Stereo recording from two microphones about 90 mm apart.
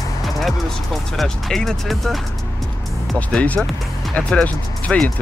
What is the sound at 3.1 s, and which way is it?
Speech, 15° left (ahead or behind).